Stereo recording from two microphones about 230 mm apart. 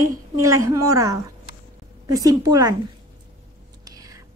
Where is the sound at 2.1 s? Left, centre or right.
Centre.